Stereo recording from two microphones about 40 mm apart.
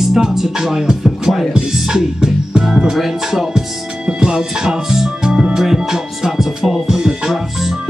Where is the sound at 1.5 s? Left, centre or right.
Centre.